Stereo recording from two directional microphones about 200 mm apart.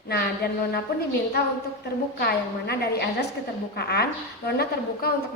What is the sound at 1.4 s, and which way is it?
A woman's voice, 55° left (ahead or behind).